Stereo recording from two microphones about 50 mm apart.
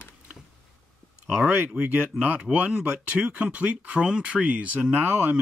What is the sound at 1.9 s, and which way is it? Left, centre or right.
Speech, right.